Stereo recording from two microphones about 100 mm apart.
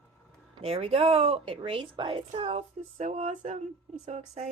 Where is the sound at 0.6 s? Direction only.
85° right.